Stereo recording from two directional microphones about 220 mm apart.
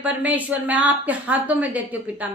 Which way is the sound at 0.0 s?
5° right (ahead or behind).